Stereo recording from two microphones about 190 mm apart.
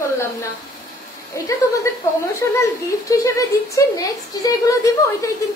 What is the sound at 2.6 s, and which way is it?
A woman's voice, 15° left (ahead or behind).